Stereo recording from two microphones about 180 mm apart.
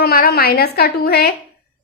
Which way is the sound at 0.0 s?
60° left (ahead or behind).